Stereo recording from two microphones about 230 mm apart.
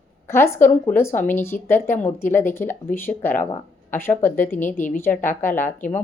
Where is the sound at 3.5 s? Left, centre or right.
Centre.